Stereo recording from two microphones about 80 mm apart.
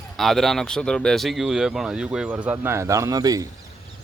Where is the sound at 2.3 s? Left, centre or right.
Right.